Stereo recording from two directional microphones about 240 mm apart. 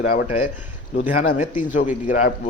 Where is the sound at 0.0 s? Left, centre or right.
Left.